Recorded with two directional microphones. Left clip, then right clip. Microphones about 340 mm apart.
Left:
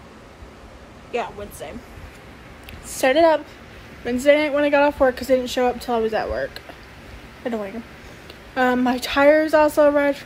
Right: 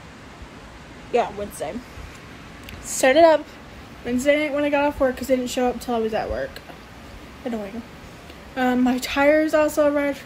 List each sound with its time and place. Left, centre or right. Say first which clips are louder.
1.1 s speech: right 5 dB; centre
3.0 s speech: right 1 dB; centre
8.5 s speech: left 2 dB; centre